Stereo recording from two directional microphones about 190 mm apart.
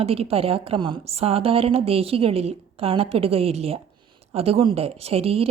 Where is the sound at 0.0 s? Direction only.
30° right (ahead or behind).